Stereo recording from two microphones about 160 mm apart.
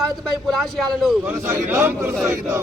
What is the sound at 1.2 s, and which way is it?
Speech, 15° right (ahead or behind).